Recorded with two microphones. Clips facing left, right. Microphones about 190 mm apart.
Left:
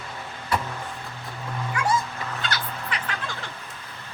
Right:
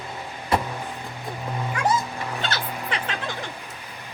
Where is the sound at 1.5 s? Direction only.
20° right (ahead or behind).